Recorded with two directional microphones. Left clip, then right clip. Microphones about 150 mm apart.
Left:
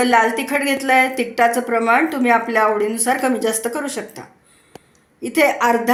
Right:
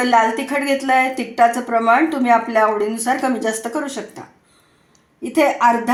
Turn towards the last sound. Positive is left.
turn(degrees=-20)  # may be behind; listen again after turning